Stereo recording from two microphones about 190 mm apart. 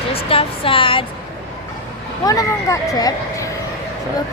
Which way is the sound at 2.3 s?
20° left (ahead or behind).